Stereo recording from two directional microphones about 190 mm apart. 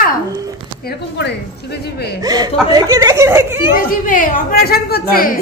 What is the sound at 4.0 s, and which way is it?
A woman's voice, 45° left (ahead or behind).